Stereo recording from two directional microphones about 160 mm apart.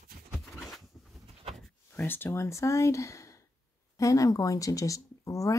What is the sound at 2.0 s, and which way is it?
Speech, 15° left (ahead or behind).